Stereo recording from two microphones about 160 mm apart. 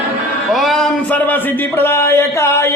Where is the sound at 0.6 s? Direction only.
Centre (ahead or behind).